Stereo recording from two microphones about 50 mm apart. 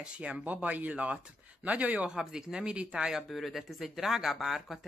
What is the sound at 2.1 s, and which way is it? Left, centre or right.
Speech, centre.